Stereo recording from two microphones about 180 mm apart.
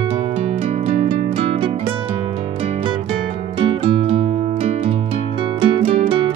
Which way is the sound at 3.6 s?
30° right (ahead or behind).